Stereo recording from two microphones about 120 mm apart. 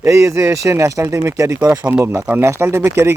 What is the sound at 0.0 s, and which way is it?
Speech, 25° right (ahead or behind).